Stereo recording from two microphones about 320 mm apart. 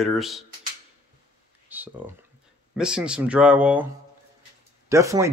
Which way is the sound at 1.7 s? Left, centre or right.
Centre.